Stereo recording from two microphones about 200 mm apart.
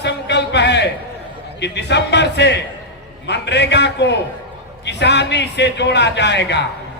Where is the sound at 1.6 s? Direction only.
60° left (ahead or behind).